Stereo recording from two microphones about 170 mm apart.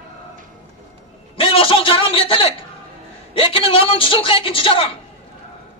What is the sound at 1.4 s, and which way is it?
A man's voice, 30° left (ahead or behind).